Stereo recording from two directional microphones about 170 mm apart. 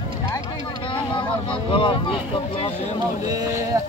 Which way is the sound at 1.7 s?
30° left (ahead or behind).